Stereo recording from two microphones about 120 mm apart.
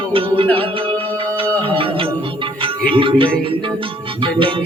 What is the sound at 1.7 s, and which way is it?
Music, 45° right (ahead or behind).